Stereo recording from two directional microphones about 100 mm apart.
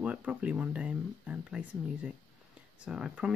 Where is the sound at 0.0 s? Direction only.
10° right (ahead or behind).